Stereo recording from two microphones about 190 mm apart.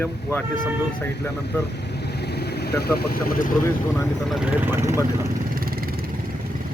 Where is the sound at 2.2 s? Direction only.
60° left (ahead or behind).